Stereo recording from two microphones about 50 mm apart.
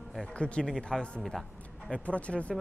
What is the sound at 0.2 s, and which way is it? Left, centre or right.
A woman's voice, left.